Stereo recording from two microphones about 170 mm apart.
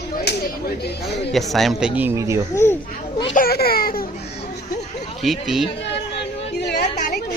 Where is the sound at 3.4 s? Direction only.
65° left (ahead or behind).